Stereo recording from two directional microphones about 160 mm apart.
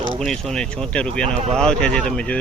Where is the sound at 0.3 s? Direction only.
5° left (ahead or behind).